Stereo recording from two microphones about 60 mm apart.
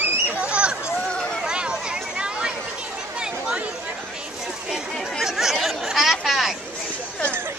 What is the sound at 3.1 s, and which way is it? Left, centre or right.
Chatter, centre.